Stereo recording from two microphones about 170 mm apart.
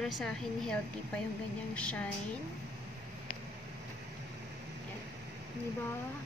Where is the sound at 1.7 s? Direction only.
5° left (ahead or behind).